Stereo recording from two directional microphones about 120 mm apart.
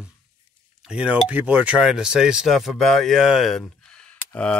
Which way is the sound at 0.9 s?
10° right (ahead or behind).